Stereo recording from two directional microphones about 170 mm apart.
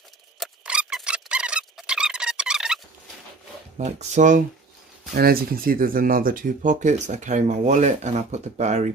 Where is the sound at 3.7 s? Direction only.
45° right (ahead or behind).